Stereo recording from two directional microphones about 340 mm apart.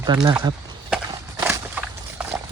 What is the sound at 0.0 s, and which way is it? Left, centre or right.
Speech, centre.